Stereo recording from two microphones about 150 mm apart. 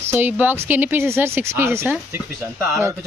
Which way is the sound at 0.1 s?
10° right (ahead or behind).